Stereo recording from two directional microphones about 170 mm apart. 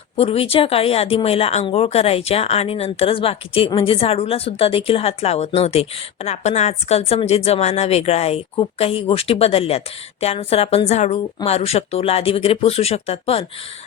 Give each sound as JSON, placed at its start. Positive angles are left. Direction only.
{"t": 0.2, "sound": "speech", "side_deg": 35}